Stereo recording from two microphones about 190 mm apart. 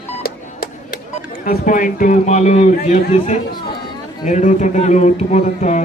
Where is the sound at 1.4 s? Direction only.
45° left (ahead or behind).